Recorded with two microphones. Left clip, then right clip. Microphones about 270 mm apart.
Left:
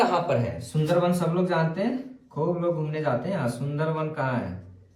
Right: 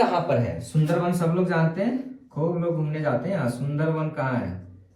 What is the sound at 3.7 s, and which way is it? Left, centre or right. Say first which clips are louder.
Speech: right 1 dB; centre.